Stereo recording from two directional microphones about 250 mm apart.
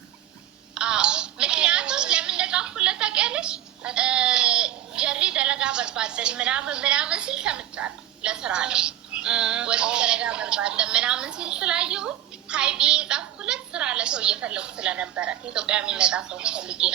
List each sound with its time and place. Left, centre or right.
0.7 s a woman's voice: centre